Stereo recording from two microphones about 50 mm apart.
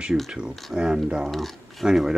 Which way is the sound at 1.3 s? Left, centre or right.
Centre.